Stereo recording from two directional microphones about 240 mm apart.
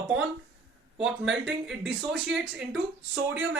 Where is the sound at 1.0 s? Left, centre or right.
Centre.